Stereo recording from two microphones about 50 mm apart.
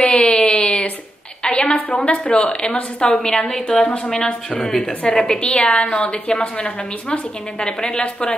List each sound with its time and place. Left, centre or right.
0.0 s a sound: left
1.4 s a woman's voice: left
3.2 s a woman's voice: centre